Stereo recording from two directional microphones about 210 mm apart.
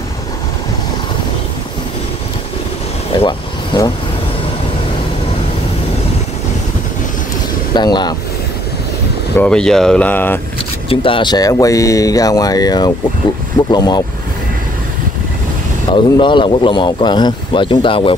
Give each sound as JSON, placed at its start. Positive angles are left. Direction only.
{"t": 3.2, "sound": "speech", "side_deg": 20}
{"t": 7.7, "sound": "speech", "side_deg": 20}
{"t": 9.4, "sound": "speech", "side_deg": 5}
{"t": 10.9, "sound": "speech", "side_deg": 25}
{"t": 15.9, "sound": "speech", "side_deg": 25}